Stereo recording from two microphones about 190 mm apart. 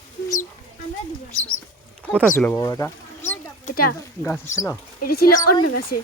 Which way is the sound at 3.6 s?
50° left (ahead or behind).